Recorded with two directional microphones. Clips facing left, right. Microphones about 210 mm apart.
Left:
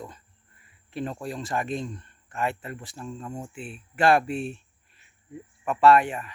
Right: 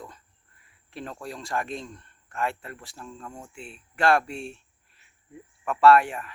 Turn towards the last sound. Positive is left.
turn(degrees=0)  # may be behind; listen again after turning